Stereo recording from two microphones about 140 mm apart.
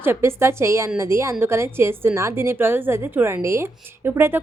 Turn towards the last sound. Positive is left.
turn(degrees=-15)  # may be behind; listen again after turning